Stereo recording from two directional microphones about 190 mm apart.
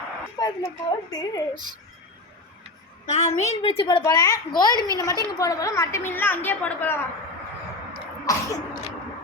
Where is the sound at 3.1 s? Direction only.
35° left (ahead or behind); by 6.9 s 10° left (ahead or behind).